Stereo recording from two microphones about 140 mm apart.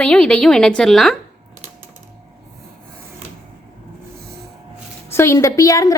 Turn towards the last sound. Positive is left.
turn(degrees=25)  # may be behind; listen again after turning